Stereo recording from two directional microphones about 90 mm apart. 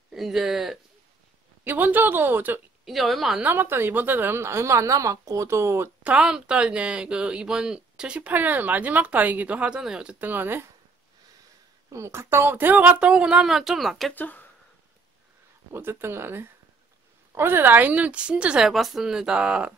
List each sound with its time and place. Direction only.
0.1 s speech: 5° right (ahead or behind)
1.6 s a woman's voice: 20° right (ahead or behind)
2.8 s speech: centre (ahead or behind)
3.3 s a woman's voice: 20° right (ahead or behind)
6.0 s speech: 10° right (ahead or behind)
11.9 s speech: 30° right (ahead or behind); by 14.1 s centre (ahead or behind)
14.1 s speech: 20° left (ahead or behind)
15.7 s a woman's voice: 25° right (ahead or behind)
18.7 s speech: centre (ahead or behind)